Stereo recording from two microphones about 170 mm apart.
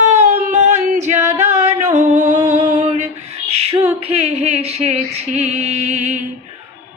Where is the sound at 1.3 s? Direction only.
40° right (ahead or behind).